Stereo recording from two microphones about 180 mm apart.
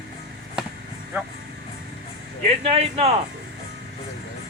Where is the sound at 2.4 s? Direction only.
35° right (ahead or behind).